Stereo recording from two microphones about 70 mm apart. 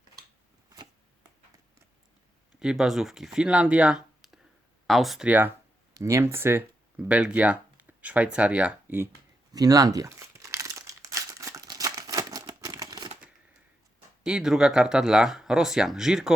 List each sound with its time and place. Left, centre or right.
2.6 s speech: centre
5.2 s speech: right
5.9 s speech: right
6.2 s speech: right
6.9 s speech: centre
9.5 s speech: right
10.2 s crumpling: right
14.3 s speech: centre